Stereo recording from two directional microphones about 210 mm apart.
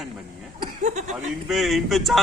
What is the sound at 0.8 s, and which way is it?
Speech, 35° right (ahead or behind).